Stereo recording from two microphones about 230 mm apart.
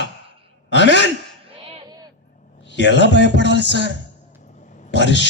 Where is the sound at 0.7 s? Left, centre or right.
Left.